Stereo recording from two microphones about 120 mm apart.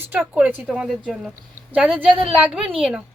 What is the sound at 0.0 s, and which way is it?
A woman's voice, 15° right (ahead or behind).